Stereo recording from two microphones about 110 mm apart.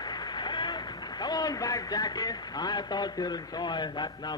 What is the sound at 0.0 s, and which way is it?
A man's voice, 40° left (ahead or behind).